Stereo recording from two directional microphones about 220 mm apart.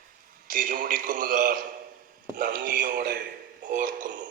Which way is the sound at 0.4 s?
40° right (ahead or behind).